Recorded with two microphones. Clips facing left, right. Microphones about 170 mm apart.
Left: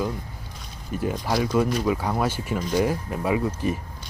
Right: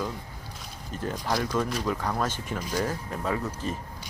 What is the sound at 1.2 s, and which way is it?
Speech, 10° left (ahead or behind).